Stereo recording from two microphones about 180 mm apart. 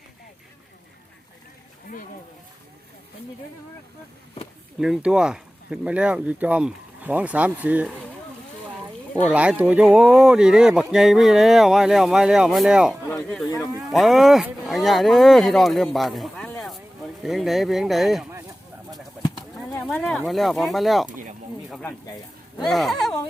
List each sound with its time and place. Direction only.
4.8 s speech: 5° right (ahead or behind)
9.3 s speech: 5° right (ahead or behind)
19.8 s speech: 5° left (ahead or behind)
21.1 s a sound: 45° right (ahead or behind)
21.7 s speech: 5° left (ahead or behind)